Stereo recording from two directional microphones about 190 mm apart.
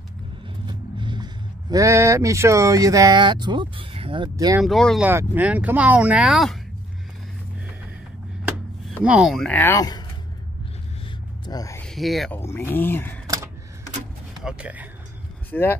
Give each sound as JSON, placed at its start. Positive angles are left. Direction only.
{"t": 0.7, "sound": "speech", "side_deg": -25}
{"t": 4.6, "sound": "speech", "side_deg": 0}
{"t": 5.0, "sound": "speech", "side_deg": -10}
{"t": 9.0, "sound": "speech", "side_deg": -5}
{"t": 11.4, "sound": "speech", "side_deg": 20}
{"t": 11.8, "sound": "speech", "side_deg": 0}
{"t": 12.4, "sound": "speech", "side_deg": 10}
{"t": 14.4, "sound": "speech", "side_deg": -5}
{"t": 15.5, "sound": "speech", "side_deg": 10}